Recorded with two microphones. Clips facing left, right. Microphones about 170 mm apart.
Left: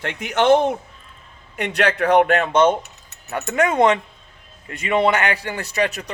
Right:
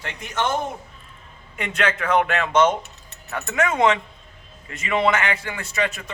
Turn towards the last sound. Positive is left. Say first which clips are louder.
# left 3 dB
turn(degrees=40)  # may be behind; listen again after turning